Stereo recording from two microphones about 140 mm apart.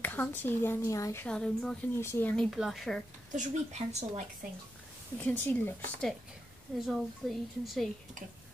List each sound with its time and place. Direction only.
0.0 s speech: 10° left (ahead or behind)
1.2 s speech: 5° left (ahead or behind)
2.0 s speech: 15° left (ahead or behind)
2.3 s speech: centre (ahead or behind)
3.3 s speech: 55° right (ahead or behind)
5.1 s speech: 15° left (ahead or behind)
6.9 s speech: centre (ahead or behind)